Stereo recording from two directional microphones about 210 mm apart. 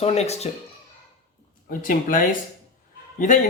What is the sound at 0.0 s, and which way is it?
Speech, 30° left (ahead or behind).